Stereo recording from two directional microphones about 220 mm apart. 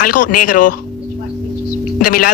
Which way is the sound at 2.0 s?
40° left (ahead or behind).